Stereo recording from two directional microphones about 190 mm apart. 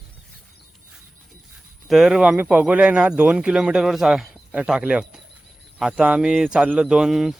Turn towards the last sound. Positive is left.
turn(degrees=0)  # may be behind; listen again after turning